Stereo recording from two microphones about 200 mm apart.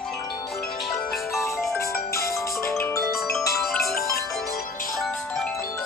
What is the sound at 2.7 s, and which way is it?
Glockenspiel, 10° left (ahead or behind).